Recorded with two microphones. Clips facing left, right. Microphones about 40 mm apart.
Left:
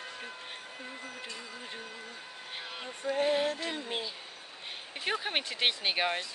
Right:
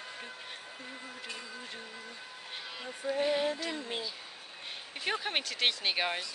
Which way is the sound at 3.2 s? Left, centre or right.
Left.